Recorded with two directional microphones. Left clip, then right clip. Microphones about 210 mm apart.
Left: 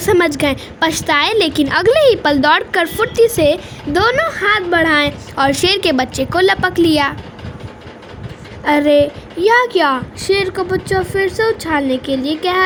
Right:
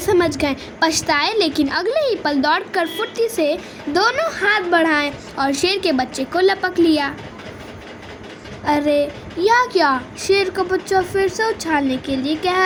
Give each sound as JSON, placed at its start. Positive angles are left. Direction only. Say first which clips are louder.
{"t": 0.0, "sound": "a woman's voice", "louder": "left 4 dB", "side_deg": 40}
{"t": 8.6, "sound": "a woman's voice", "louder": "left 6 dB", "side_deg": 35}